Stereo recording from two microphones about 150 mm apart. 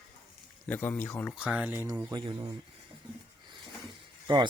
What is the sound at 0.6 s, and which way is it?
Speech, 10° left (ahead or behind).